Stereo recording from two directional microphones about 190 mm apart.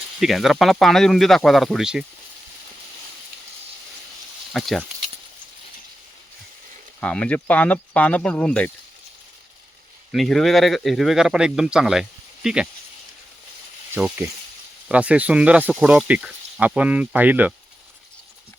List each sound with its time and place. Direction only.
0.2 s speech: centre (ahead or behind)
4.5 s speech: centre (ahead or behind)
7.0 s speech: 5° left (ahead or behind)
10.1 s speech: centre (ahead or behind)
13.9 s speech: 10° right (ahead or behind)